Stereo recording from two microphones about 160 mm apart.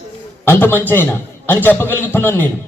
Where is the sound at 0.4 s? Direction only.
10° left (ahead or behind).